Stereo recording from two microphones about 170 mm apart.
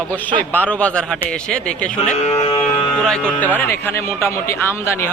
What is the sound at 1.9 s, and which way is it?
Speech, 35° left (ahead or behind).